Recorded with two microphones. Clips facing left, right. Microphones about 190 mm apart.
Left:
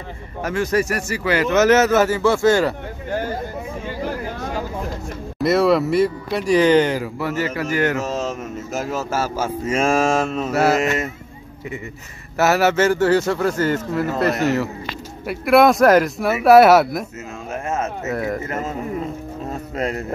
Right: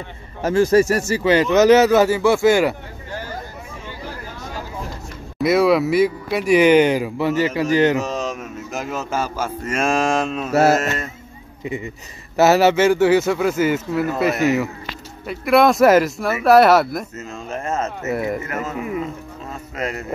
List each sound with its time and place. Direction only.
0.4 s speech: 30° right (ahead or behind); by 2.7 s 10° right (ahead or behind)
5.4 s speech: centre (ahead or behind); by 8.1 s 20° right (ahead or behind)
8.7 s speech: 5° left (ahead or behind)
10.0 s speech: 15° right (ahead or behind)
10.8 s speech: centre (ahead or behind)
12.4 s speech: 20° right (ahead or behind); by 17.9 s 10° left (ahead or behind)
18.1 s speech: 5° right (ahead or behind)
19.5 s a sound: 35° left (ahead or behind)